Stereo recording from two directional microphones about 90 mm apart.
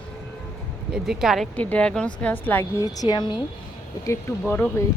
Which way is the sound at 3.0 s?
50° left (ahead or behind).